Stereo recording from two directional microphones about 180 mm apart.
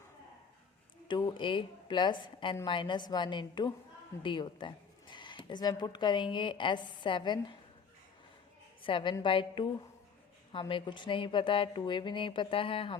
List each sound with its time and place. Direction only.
1.0 s a woman's voice: 25° left (ahead or behind)
8.8 s a woman's voice: 30° left (ahead or behind)